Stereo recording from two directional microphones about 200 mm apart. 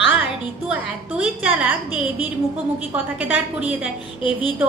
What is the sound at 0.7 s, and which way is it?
A woman's voice, 5° right (ahead or behind).